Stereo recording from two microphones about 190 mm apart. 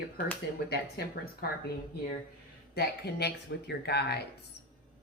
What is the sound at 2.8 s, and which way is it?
Speech, 60° left (ahead or behind).